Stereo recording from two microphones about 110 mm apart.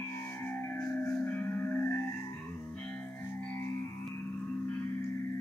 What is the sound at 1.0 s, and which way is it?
Music, 15° left (ahead or behind).